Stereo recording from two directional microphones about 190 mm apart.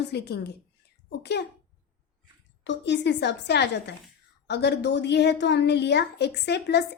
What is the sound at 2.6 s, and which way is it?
Speech, 65° left (ahead or behind).